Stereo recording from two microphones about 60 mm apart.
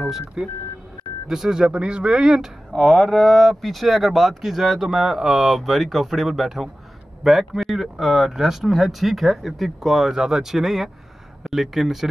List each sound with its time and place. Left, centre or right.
0.4 s speech: centre
2.7 s speech: centre